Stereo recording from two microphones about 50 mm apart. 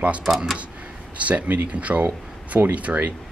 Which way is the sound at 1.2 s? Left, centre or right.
Right.